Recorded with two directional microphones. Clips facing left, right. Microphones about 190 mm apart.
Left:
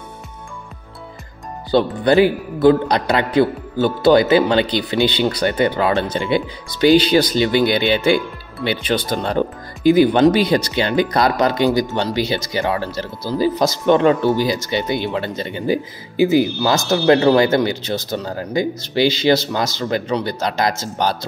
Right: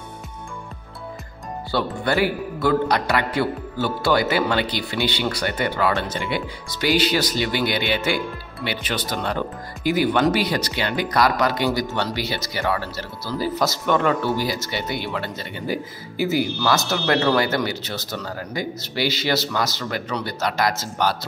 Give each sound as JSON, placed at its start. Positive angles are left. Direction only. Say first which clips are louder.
{"t": 1.7, "sound": "speech", "louder": "left 8 dB", "side_deg": 20}